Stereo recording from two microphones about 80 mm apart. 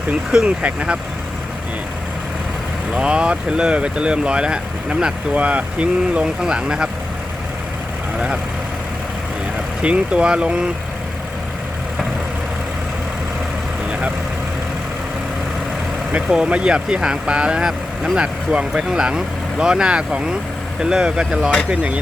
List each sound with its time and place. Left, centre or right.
0.3 s speech: centre
2.9 s speech: centre
9.8 s speech: centre
16.1 s speech: centre